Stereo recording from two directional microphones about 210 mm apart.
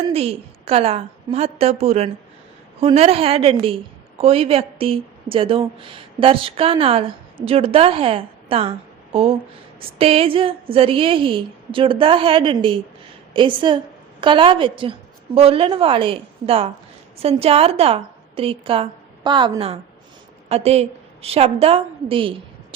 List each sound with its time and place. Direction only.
0.1 s a woman's voice: 30° right (ahead or behind)